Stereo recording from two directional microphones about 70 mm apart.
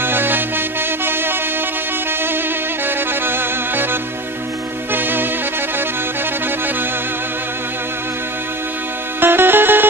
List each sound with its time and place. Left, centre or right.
0.0 s music: right
3.1 s music: right
9.2 s music: right